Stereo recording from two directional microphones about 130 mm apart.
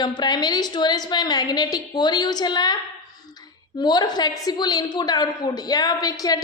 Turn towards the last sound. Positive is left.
turn(degrees=30)  # may be behind; listen again after turning